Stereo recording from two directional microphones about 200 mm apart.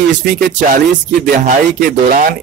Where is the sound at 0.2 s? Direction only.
45° right (ahead or behind).